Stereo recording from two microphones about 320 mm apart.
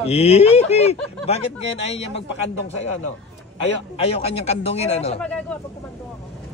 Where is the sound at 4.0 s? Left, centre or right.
Centre.